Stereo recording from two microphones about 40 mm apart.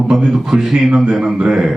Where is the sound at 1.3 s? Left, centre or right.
Centre.